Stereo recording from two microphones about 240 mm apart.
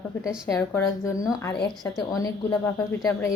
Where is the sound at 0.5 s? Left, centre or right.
Centre.